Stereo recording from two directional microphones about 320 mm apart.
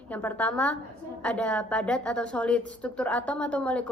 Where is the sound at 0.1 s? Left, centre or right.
Centre.